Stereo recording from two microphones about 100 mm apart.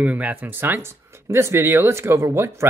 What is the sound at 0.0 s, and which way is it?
Speech, 15° right (ahead or behind).